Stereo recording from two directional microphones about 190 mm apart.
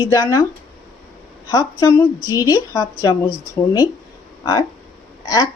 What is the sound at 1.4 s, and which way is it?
Speech, 20° left (ahead or behind).